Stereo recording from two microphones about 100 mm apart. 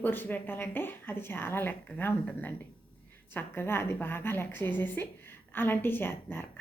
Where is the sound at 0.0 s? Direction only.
20° left (ahead or behind).